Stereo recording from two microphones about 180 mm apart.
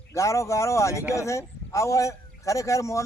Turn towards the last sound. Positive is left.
turn(degrees=15)  # may be behind; listen again after turning